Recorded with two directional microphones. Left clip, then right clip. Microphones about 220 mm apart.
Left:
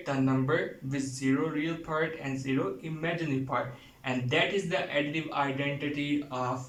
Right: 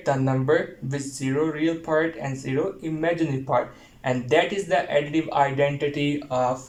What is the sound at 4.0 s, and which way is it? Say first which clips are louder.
Speech: right 7 dB; 35° right (ahead or behind).